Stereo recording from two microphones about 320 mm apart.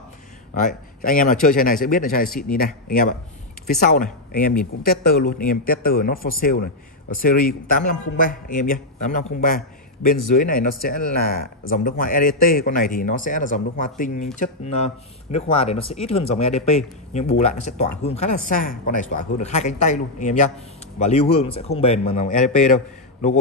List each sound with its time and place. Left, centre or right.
0.6 s speech: left